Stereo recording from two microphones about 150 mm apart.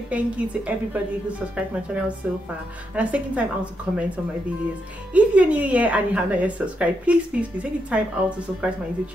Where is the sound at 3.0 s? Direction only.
10° right (ahead or behind).